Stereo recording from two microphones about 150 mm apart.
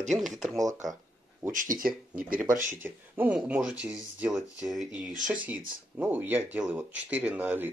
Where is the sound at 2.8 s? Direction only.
10° right (ahead or behind).